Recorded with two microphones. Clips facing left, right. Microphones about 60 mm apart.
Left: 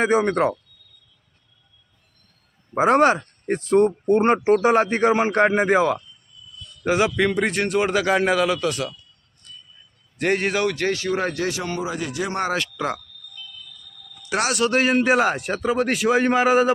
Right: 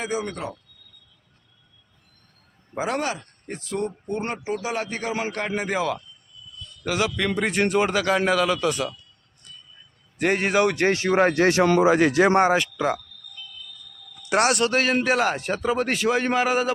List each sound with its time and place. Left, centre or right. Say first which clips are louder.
0.0 s speech: left 9 dB; left
0.3 s speech: left 12 dB; left
2.7 s speech: left 10 dB; left
4.4 s speech: left 11 dB; left
4.7 s a man's voice: left 10 dB; left
7.2 s a man's voice: left 2 dB; centre
10.2 s a man's voice: right 1 dB; centre
10.7 s speech: right 2 dB; right
11.8 s speech: right 9 dB; right
12.4 s speech: right 5 dB; centre
12.6 s a man's voice: right 2 dB; centre
14.3 s speech: right 3 dB; right
14.6 s a man's voice: left 3 dB; centre